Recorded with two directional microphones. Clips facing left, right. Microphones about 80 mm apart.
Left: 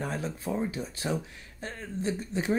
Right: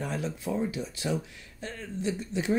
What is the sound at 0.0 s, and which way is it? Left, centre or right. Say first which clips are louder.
Speech: right 1 dB; left.